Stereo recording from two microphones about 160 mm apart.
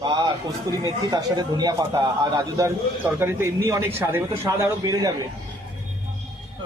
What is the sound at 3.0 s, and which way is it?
Speech, 15° right (ahead or behind).